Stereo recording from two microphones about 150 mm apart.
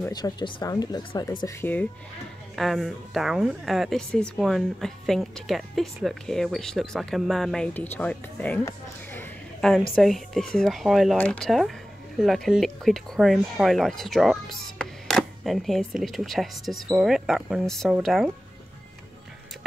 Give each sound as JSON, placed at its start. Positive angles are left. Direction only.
{"t": 0.1, "sound": "speech", "side_deg": 30}
{"t": 2.5, "sound": "a woman's voice", "side_deg": 0}
{"t": 8.6, "sound": "a sound", "side_deg": 15}
{"t": 9.9, "sound": "a woman's voice", "side_deg": 0}